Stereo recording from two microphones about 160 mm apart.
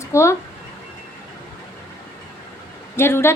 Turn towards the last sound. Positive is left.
turn(degrees=15)  # may be behind; listen again after turning